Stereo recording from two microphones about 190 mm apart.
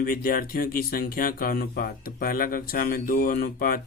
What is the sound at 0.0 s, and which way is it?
Speech, 50° left (ahead or behind).